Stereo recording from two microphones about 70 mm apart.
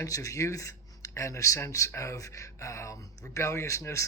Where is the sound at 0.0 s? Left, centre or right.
Left.